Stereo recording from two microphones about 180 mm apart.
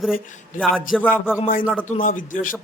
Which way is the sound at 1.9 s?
50° left (ahead or behind).